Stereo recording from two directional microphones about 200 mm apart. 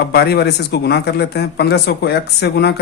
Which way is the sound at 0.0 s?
55° left (ahead or behind).